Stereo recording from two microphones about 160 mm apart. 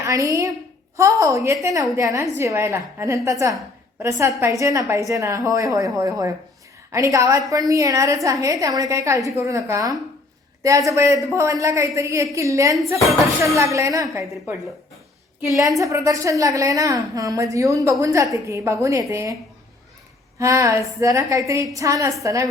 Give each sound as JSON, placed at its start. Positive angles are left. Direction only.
{"t": 0.0, "sound": "a woman's voice", "side_deg": -20}
{"t": 15.4, "sound": "a woman's voice", "side_deg": -20}
{"t": 20.4, "sound": "a woman's voice", "side_deg": -20}